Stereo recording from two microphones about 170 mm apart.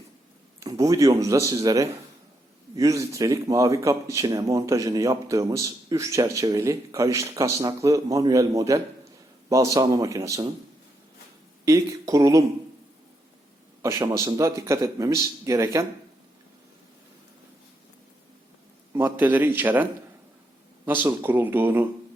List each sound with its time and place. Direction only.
0.6 s speech: 20° right (ahead or behind)
11.6 s speech: 20° right (ahead or behind)
13.8 s a man's voice: 20° right (ahead or behind)
18.9 s a man's voice: 10° right (ahead or behind)